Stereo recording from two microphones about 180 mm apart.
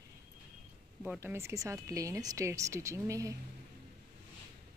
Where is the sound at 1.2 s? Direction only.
15° right (ahead or behind).